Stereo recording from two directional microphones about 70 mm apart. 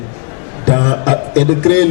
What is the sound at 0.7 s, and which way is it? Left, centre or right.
Music, left.